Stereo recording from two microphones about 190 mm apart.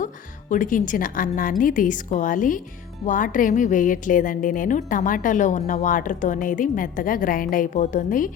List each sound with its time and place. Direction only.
0.5 s a woman's voice: 45° left (ahead or behind)